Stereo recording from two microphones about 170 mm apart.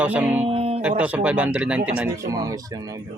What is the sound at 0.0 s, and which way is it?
Speech, 10° right (ahead or behind).